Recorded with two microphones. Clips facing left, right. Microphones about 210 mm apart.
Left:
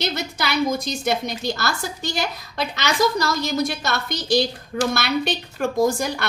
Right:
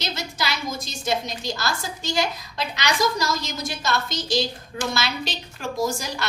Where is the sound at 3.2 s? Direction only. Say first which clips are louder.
Left 5 dB; 60° left (ahead or behind).